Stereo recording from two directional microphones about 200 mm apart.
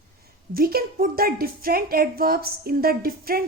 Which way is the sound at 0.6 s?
50° right (ahead or behind).